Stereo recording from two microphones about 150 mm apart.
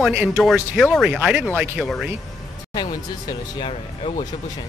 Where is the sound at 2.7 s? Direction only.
30° left (ahead or behind).